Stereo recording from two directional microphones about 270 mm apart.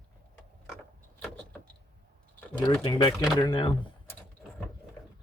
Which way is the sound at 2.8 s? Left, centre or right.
Centre.